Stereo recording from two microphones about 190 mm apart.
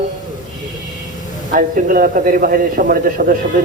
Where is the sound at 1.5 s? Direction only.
45° right (ahead or behind).